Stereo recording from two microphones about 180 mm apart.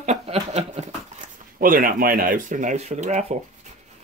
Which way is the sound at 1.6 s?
50° right (ahead or behind).